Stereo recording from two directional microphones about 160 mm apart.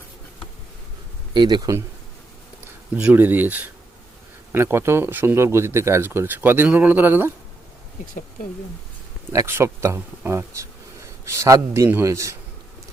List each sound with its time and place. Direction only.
1.3 s speech: 30° right (ahead or behind)
2.9 s speech: 10° right (ahead or behind)
9.3 s speech: 15° right (ahead or behind)